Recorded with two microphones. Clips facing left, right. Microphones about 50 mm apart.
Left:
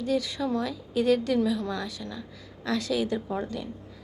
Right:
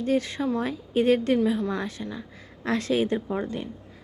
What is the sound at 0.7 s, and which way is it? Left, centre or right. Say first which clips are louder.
A woman's voice: right 3 dB; right.